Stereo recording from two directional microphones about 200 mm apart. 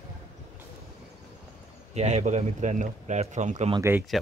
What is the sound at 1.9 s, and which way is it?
Speech, 35° right (ahead or behind).